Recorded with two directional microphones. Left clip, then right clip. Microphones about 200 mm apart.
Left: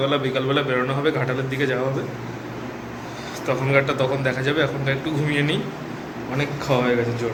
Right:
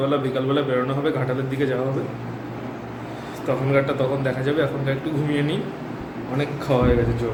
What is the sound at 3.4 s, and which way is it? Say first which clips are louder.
A man's voice: left 1 dB; 5° right (ahead or behind).